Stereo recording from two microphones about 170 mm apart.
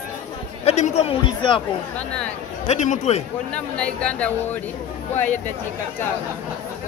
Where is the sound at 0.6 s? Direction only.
40° left (ahead or behind).